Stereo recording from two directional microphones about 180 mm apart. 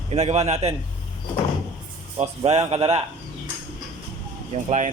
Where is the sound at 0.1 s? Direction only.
40° right (ahead or behind).